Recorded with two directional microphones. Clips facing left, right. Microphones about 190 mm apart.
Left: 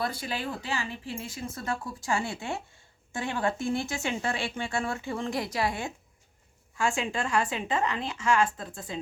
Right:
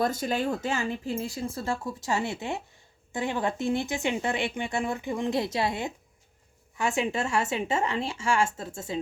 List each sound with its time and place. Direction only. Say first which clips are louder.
0.0 s speech: right 6 dB; 45° right (ahead or behind)
1.5 s speech: right 3 dB; 30° right (ahead or behind)